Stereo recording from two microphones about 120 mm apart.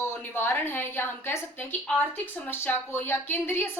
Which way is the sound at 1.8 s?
5° left (ahead or behind).